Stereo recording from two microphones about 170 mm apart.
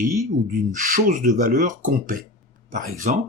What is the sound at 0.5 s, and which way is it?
Speech, 45° right (ahead or behind).